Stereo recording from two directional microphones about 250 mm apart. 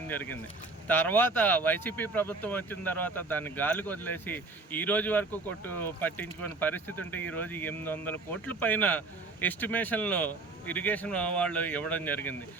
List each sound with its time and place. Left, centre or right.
0.1 s speech: centre